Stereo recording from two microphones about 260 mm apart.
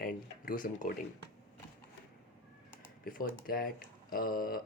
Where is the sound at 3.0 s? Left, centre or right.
Left.